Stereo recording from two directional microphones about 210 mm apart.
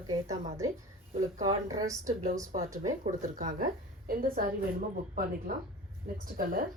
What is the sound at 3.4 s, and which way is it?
A woman's voice, 35° right (ahead or behind).